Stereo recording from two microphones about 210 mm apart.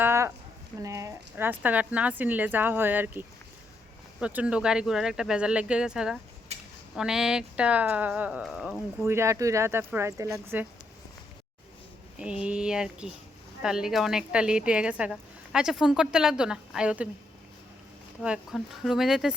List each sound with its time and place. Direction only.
0.0 s a sound: 10° right (ahead or behind)
0.8 s a woman's voice: 15° right (ahead or behind)
6.5 s a sound: 30° right (ahead or behind)
6.9 s a woman's voice: centre (ahead or behind)
9.0 s speech: 15° right (ahead or behind)
12.2 s a woman's voice: 5° right (ahead or behind)
18.2 s a woman's voice: centre (ahead or behind)